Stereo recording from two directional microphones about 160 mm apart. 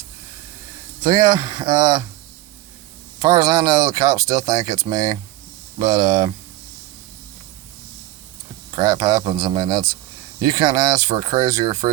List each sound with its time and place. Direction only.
1.0 s speech: 25° right (ahead or behind)
3.2 s speech: 25° right (ahead or behind)
8.7 s speech: 25° right (ahead or behind)